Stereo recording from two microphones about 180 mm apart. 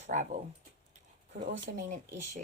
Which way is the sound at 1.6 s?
40° right (ahead or behind).